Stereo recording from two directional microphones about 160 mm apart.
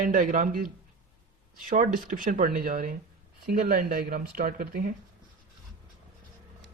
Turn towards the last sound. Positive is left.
turn(degrees=-65)  # may be behind; listen again after turning